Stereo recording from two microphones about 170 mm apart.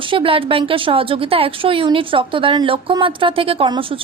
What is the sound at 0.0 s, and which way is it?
Speech, 30° right (ahead or behind).